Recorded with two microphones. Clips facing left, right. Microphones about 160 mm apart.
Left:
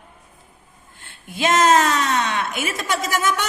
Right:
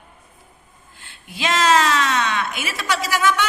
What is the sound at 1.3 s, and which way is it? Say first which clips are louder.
A woman's voice: left 2 dB; 45° left (ahead or behind).